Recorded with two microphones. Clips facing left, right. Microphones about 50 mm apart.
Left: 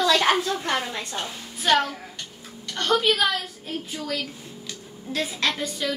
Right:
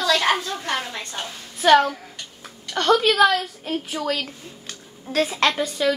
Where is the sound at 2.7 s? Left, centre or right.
Right.